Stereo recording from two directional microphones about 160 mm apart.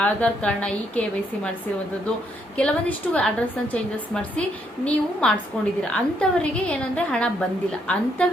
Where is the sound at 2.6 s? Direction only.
10° left (ahead or behind).